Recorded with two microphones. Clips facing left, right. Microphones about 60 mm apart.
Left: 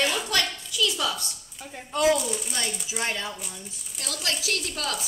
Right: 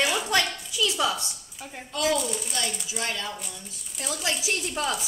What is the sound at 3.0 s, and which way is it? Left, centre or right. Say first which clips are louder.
Speech: left 1 dB; left.